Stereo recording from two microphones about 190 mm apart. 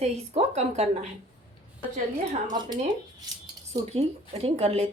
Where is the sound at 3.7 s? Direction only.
30° right (ahead or behind).